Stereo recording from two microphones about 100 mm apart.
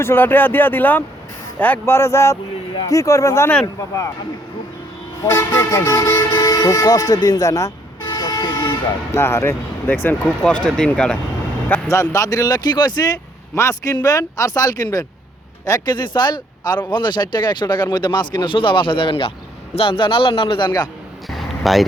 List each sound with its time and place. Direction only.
0.0 s speech: 25° left (ahead or behind)
1.8 s speech: 25° left (ahead or behind)
5.2 s speech: 25° left (ahead or behind); by 8.7 s 45° left (ahead or behind)
9.1 s speech: 25° left (ahead or behind)
10.4 s speech: 10° left (ahead or behind)
11.9 s speech: 30° left (ahead or behind)
13.6 s a man's voice: 30° left (ahead or behind); by 20.9 s 50° left (ahead or behind)
21.2 s a sound: centre (ahead or behind)